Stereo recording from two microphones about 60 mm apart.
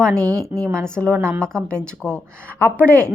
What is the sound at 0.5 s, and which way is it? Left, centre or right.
Speech, right.